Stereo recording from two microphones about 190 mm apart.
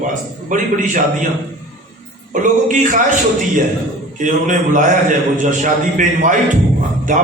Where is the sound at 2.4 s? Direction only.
45° right (ahead or behind).